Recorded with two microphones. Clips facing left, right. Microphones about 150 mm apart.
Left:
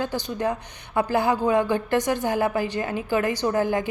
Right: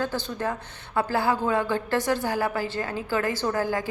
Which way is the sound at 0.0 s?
15° left (ahead or behind).